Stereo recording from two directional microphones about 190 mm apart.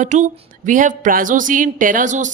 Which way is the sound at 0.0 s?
40° right (ahead or behind).